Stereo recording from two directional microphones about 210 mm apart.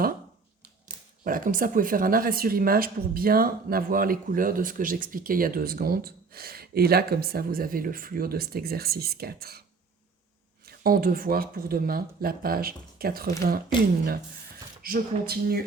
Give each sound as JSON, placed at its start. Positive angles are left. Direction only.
{"t": 1.2, "sound": "speech", "side_deg": -40}
{"t": 10.7, "sound": "speech", "side_deg": -45}
{"t": 14.8, "sound": "speech", "side_deg": -45}